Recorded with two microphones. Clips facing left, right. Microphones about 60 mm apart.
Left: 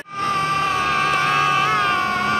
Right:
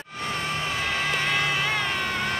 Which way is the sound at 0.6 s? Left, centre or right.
Left.